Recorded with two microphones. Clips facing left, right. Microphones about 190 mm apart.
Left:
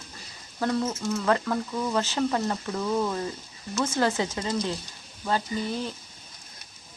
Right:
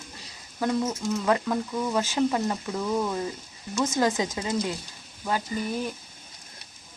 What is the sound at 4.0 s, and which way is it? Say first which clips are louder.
Speech: even; 15° right (ahead or behind).